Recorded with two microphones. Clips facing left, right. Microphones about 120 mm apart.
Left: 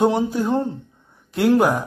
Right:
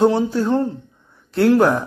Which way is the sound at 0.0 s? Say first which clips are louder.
Right 2 dB; 15° left (ahead or behind).